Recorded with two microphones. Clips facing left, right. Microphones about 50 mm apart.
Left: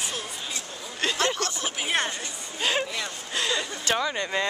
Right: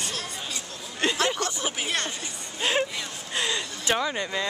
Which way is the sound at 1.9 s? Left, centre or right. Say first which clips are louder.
Left 6 dB; centre.